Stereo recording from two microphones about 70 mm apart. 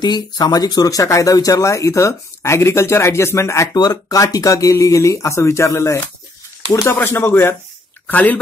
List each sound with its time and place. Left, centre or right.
0.0 s speech: left
3.7 s speech: left
6.9 s speech: left
8.1 s speech: left